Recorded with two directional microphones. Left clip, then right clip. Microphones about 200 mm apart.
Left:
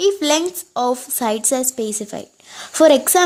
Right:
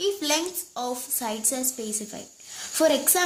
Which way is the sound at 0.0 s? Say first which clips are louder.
Left 9 dB; 55° left (ahead or behind).